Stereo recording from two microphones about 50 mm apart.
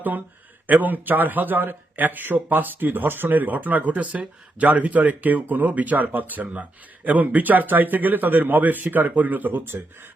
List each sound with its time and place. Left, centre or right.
0.7 s speech: right